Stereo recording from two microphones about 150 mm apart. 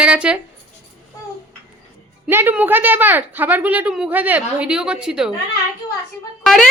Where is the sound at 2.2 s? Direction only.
15° right (ahead or behind).